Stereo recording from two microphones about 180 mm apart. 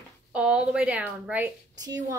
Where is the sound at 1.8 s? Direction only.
20° right (ahead or behind).